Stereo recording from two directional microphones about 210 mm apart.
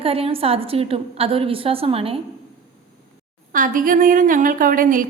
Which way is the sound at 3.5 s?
40° right (ahead or behind).